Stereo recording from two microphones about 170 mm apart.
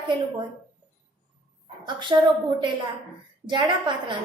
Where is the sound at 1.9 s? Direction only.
25° right (ahead or behind).